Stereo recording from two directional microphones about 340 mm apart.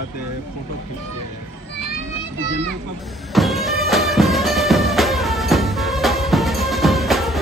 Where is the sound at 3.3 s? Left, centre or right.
Centre.